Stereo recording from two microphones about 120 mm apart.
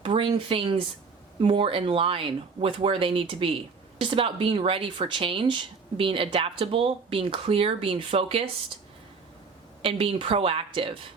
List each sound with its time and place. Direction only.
0.0 s speech: 45° right (ahead or behind)
9.8 s speech: 50° right (ahead or behind)